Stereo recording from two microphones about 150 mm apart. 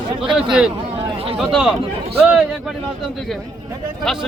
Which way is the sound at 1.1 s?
40° right (ahead or behind).